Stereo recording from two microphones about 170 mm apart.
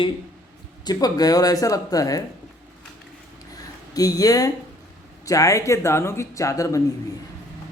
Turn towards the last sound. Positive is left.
turn(degrees=20)  # may be behind; listen again after turning